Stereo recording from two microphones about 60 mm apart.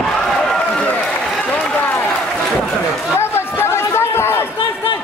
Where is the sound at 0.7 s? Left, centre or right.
Left.